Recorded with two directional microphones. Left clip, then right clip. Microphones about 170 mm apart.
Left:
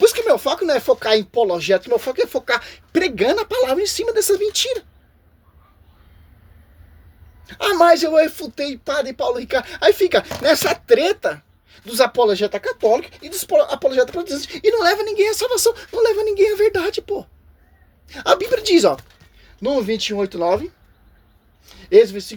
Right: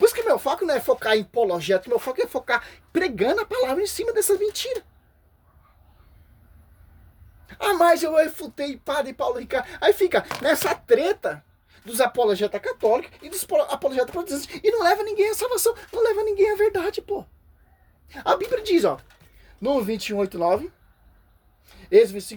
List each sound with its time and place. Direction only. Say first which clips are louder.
0.0 s speech: left 4 dB; 5° left (ahead or behind)
7.4 s speech: left 5 dB; centre (ahead or behind)
18.5 s speech: left 6 dB; 20° left (ahead or behind)
19.6 s speech: left 4 dB; 10° right (ahead or behind)
21.7 s speech: left 4 dB; centre (ahead or behind)